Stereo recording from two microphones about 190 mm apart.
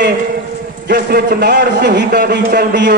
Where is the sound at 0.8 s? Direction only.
55° right (ahead or behind).